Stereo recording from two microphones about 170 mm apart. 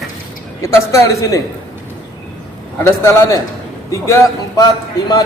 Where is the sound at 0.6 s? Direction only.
20° left (ahead or behind).